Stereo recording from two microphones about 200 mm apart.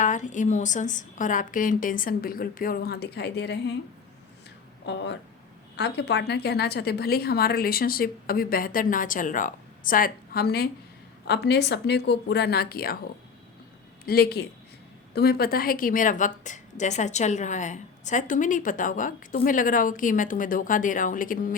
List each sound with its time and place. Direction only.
0.0 s a woman's voice: 40° left (ahead or behind); by 3.8 s 60° left (ahead or behind)
4.9 s a woman's voice: 60° left (ahead or behind)
14.0 s a woman's voice: 50° left (ahead or behind)